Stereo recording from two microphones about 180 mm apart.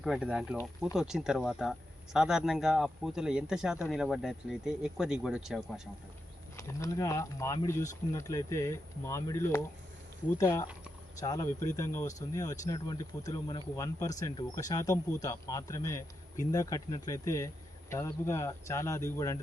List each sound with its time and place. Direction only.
0.0 s speech: 5° right (ahead or behind)
6.6 s speech: 15° left (ahead or behind)